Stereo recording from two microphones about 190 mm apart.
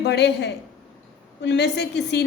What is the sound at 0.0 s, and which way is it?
A woman's voice, 65° left (ahead or behind).